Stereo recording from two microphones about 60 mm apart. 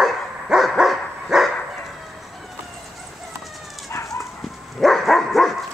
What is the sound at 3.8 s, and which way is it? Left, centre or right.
Dog, left.